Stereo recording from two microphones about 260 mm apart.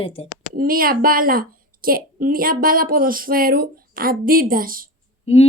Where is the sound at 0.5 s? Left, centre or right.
Right.